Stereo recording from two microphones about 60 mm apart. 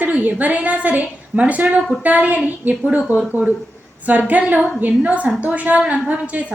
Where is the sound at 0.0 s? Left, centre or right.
Right.